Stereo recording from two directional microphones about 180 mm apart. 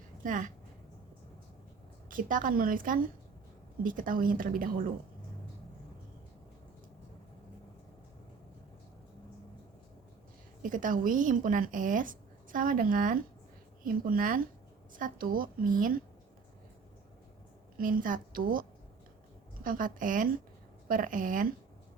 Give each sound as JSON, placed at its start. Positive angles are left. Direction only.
{"t": 0.2, "sound": "a woman's voice", "side_deg": -45}
{"t": 2.0, "sound": "speech", "side_deg": -50}
{"t": 10.6, "sound": "speech", "side_deg": -45}
{"t": 17.7, "sound": "speech", "side_deg": -50}
{"t": 19.6, "sound": "speech", "side_deg": -50}